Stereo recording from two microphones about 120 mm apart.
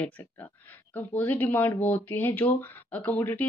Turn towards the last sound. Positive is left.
turn(degrees=15)  # may be behind; listen again after turning